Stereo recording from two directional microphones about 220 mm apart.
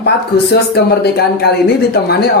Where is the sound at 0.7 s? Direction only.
45° left (ahead or behind).